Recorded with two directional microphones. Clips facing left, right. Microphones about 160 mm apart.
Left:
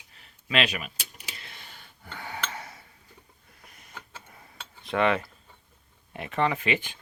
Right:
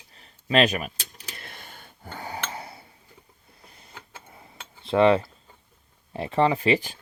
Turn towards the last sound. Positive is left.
turn(degrees=-35)  # may be behind; listen again after turning